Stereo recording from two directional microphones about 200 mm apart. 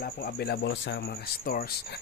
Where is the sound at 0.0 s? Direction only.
50° left (ahead or behind).